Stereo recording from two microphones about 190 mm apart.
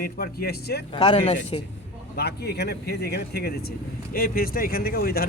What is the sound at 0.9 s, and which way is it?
Speech, 25° left (ahead or behind).